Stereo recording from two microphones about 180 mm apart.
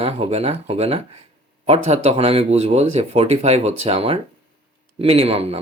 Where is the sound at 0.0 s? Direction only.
35° right (ahead or behind).